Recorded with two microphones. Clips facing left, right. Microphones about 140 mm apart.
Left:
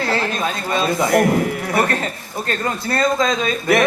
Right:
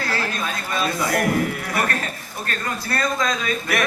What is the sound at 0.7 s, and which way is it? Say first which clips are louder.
Speech: left 6 dB; 25° left (ahead or behind).